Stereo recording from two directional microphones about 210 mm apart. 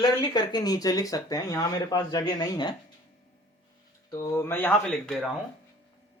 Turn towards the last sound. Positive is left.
turn(degrees=5)  # may be behind; listen again after turning